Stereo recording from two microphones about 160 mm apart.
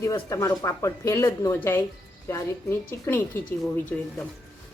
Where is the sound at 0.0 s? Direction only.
20° left (ahead or behind).